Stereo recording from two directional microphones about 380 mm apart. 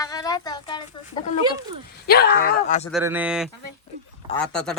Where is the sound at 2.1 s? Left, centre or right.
Left.